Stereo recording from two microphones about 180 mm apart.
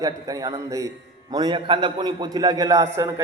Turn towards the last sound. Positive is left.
turn(degrees=-15)  # may be behind; listen again after turning